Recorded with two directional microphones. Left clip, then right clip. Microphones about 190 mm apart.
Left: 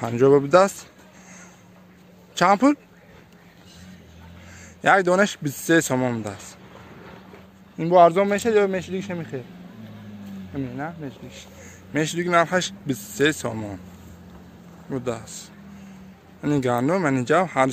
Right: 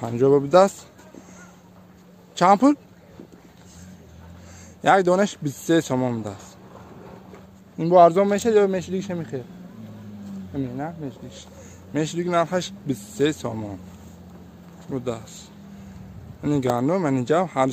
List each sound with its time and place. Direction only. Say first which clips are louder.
0.0 s speech: left 2 dB; centre (ahead or behind)
2.3 s a man's voice: right 1 dB; 10° right (ahead or behind)
4.8 s a man's voice: even; 5° right (ahead or behind)
7.7 s a man's voice: right 1 dB; 15° right (ahead or behind)
10.5 s a man's voice: right 1 dB; 15° right (ahead or behind)
11.9 s speech: left 2 dB; 5° right (ahead or behind)
14.9 s speech: left 1 dB; 5° right (ahead or behind)
16.4 s speech: even; 5° right (ahead or behind)